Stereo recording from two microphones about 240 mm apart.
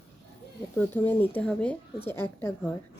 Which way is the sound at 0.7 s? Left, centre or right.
Centre.